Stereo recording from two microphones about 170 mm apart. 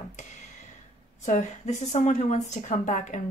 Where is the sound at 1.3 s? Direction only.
45° left (ahead or behind).